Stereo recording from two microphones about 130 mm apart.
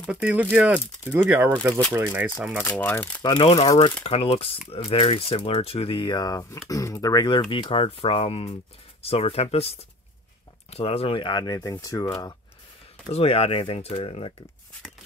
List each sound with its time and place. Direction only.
0.1 s speech: 10° right (ahead or behind)
2.6 s speech: 15° left (ahead or behind)
3.2 s speech: 35° left (ahead or behind)
10.7 s speech: 50° left (ahead or behind); by 12.4 s 25° left (ahead or behind)
13.1 s speech: 50° left (ahead or behind)